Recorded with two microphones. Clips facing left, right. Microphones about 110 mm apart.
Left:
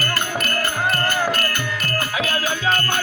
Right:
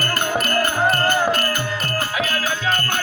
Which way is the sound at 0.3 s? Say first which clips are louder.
Right 4 dB; 35° right (ahead or behind).